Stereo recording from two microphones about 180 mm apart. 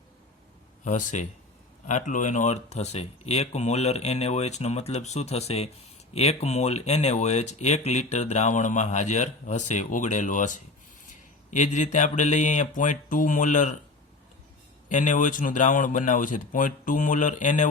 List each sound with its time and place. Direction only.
0.9 s speech: 40° left (ahead or behind)
14.8 s speech: 45° left (ahead or behind)